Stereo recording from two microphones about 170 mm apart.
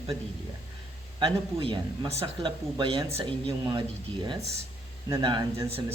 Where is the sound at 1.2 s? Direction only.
30° right (ahead or behind).